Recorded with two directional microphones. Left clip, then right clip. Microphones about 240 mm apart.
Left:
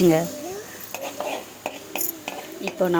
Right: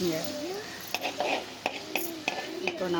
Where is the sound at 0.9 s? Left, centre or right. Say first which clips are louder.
Even; centre.